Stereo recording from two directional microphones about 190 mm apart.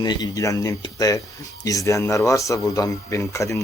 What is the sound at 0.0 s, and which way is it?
Speech, 20° left (ahead or behind).